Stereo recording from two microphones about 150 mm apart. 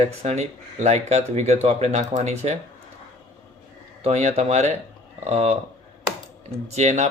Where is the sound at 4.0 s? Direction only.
45° right (ahead or behind).